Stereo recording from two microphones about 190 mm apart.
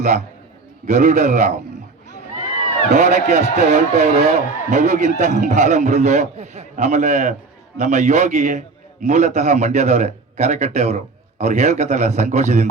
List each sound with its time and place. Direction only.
0.0 s a man's voice: 40° right (ahead or behind)
2.9 s a man's voice: 35° right (ahead or behind)